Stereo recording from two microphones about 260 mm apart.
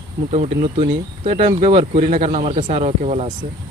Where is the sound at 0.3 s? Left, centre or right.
Right.